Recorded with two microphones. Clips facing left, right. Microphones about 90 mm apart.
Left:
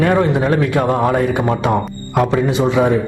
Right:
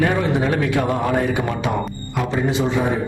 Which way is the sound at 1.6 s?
55° left (ahead or behind).